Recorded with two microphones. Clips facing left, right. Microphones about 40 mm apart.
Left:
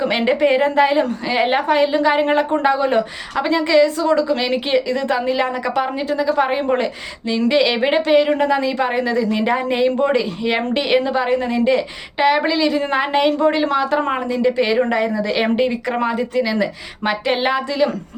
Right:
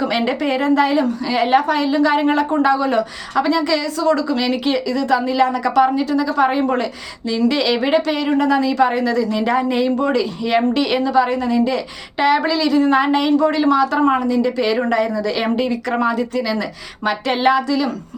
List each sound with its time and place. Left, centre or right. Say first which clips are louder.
0.0 s a woman's voice: left 2 dB; left
12.2 s a woman's voice: even; centre
17.7 s speech: left 1 dB; left